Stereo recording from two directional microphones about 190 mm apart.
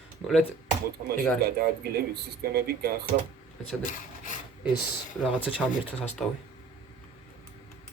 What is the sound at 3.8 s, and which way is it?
Rub, 45° left (ahead or behind).